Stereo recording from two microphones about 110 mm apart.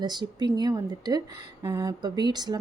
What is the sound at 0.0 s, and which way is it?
Speech, 40° right (ahead or behind).